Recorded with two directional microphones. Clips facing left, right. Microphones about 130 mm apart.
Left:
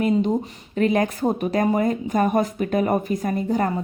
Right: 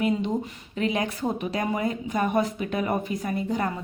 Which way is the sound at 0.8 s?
45° left (ahead or behind).